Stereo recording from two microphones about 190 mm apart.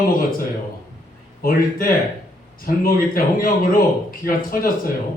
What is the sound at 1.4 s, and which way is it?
A man's voice, 50° left (ahead or behind).